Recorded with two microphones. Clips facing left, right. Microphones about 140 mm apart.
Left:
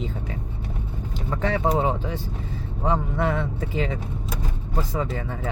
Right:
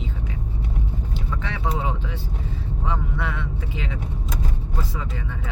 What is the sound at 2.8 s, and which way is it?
Speech, 40° left (ahead or behind).